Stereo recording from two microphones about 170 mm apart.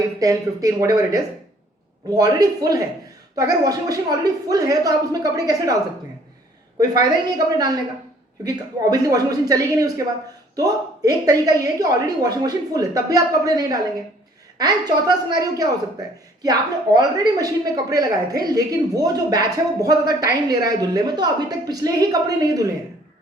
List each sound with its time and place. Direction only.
0.2 s a man's voice: 20° right (ahead or behind)
7.3 s a man's voice: 25° right (ahead or behind)